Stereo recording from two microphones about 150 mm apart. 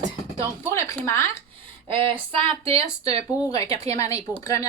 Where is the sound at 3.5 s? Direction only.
25° left (ahead or behind).